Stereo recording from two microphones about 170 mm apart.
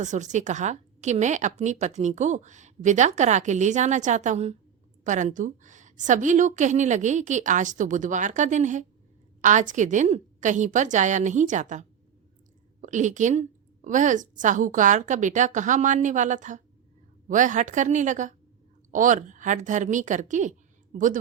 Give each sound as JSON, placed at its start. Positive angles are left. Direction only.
{"t": 0.0, "sound": "a woman's voice", "side_deg": -45}